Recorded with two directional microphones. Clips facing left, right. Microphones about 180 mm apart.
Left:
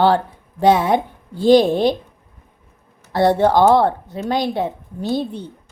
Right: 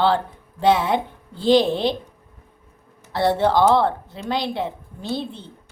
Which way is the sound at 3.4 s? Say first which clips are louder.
Left 3 dB; 45° left (ahead or behind).